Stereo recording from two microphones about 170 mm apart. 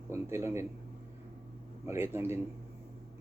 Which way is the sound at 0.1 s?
15° right (ahead or behind).